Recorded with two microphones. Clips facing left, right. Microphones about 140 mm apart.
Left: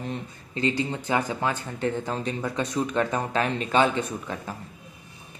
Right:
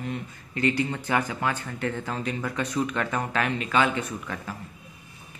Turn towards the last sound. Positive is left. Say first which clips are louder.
# left 1 dB
turn(degrees=25)  # may be behind; listen again after turning